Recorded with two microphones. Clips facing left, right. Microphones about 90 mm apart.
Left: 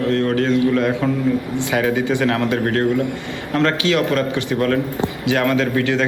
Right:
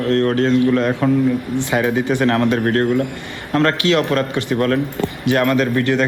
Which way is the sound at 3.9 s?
30° right (ahead or behind).